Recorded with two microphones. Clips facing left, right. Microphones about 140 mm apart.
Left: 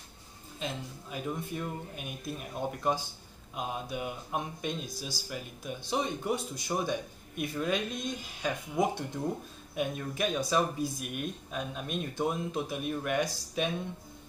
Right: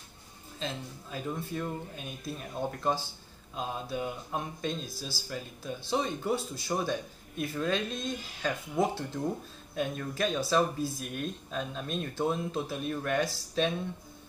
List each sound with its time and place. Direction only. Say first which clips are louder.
0.6 s speech: even; 15° left (ahead or behind)